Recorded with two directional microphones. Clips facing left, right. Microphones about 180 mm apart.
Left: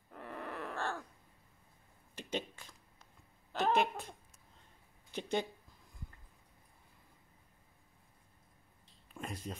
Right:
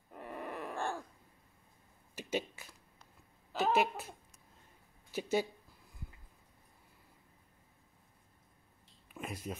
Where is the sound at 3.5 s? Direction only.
5° right (ahead or behind).